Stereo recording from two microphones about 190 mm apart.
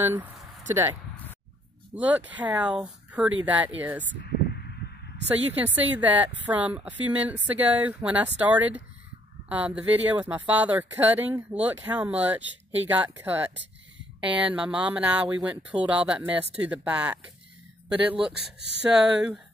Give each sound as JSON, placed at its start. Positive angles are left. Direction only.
{"t": 0.0, "sound": "speech", "side_deg": -10}
{"t": 2.0, "sound": "speech", "side_deg": -10}
{"t": 4.2, "sound": "a sound", "side_deg": 55}
{"t": 5.5, "sound": "speech", "side_deg": -10}
{"t": 18.2, "sound": "speech", "side_deg": -5}